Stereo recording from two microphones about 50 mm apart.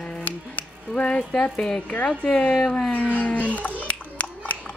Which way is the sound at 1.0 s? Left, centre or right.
Centre.